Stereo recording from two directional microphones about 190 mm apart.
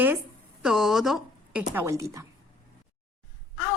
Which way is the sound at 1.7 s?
15° right (ahead or behind).